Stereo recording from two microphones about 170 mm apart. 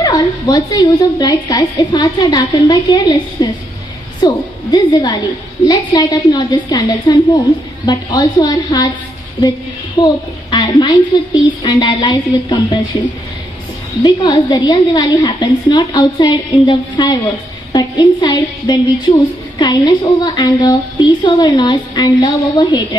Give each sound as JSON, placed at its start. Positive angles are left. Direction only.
{"t": 0.0, "sound": "a woman's voice", "side_deg": 20}
{"t": 9.9, "sound": "a woman's voice", "side_deg": 25}
{"t": 14.0, "sound": "a woman's voice", "side_deg": 25}